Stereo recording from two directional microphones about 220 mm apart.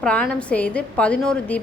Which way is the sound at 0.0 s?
5° left (ahead or behind).